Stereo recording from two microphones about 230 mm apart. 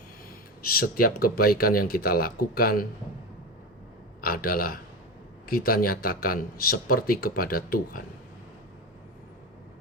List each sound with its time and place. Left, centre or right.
0.7 s speech: left
4.2 s speech: left